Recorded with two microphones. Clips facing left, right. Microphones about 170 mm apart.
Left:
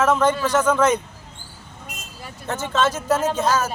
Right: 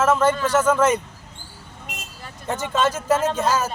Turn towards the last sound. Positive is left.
turn(degrees=-10)  # may be behind; listen again after turning